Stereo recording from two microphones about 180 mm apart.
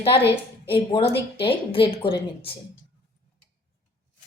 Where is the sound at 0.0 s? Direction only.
30° left (ahead or behind).